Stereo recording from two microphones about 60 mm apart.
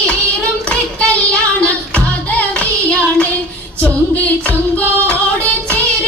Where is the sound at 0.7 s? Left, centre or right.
Left.